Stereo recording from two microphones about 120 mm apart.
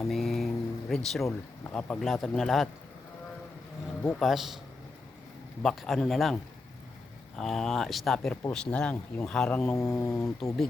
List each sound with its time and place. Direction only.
0.1 s vehicle: centre (ahead or behind)
1.2 s speech: 20° left (ahead or behind)
1.7 s speech: 5° left (ahead or behind)
4.2 s speech: centre (ahead or behind)
5.6 s speech: centre (ahead or behind)
9.6 s speech: 20° left (ahead or behind)